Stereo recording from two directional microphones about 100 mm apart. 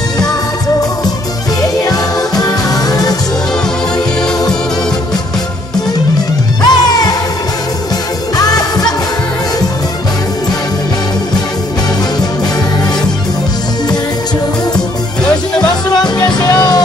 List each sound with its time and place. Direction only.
1.6 s music: 40° left (ahead or behind)
6.6 s music: 40° left (ahead or behind)
8.4 s music: 40° left (ahead or behind)
14.8 s music: 10° left (ahead or behind)
16.2 s music: 45° left (ahead or behind)